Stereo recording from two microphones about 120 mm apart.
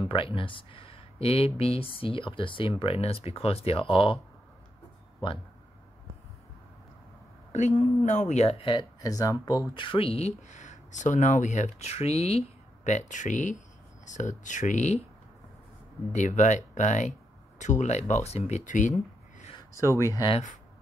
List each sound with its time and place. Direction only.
0.0 s speech: 45° left (ahead or behind)
7.7 s speech: 25° left (ahead or behind)
8.0 s speech: 90° left
8.5 s speech: 50° left (ahead or behind)
9.0 s speech: 30° left (ahead or behind)
9.8 s speech: 45° left (ahead or behind); by 15.0 s 85° left
16.1 s speech: 85° left; by 18.6 s 65° left (ahead or behind)
18.7 s a sound: 90° left
19.7 s speech: 25° left (ahead or behind)